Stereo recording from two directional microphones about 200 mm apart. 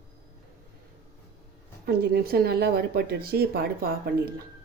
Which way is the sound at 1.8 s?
50° right (ahead or behind).